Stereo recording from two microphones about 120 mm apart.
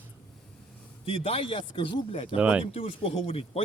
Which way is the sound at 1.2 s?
50° left (ahead or behind).